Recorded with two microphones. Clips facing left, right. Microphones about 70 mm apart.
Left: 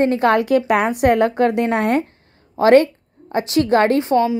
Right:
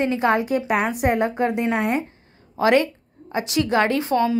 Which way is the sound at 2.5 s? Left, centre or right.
Left.